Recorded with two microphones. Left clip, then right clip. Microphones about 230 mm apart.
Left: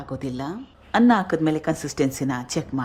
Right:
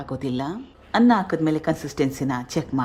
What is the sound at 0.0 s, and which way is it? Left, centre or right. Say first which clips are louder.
Speech: right 3 dB; centre.